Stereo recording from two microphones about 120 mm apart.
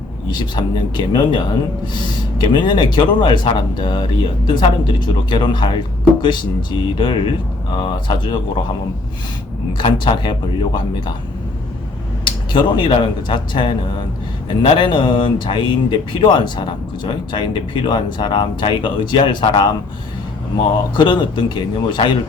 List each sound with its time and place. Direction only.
0.3 s speech: 40° left (ahead or behind)
2.4 s speech: 40° left (ahead or behind)
9.7 s speech: 40° left (ahead or behind)
12.2 s speech: 40° left (ahead or behind)
20.9 s speech: 40° left (ahead or behind)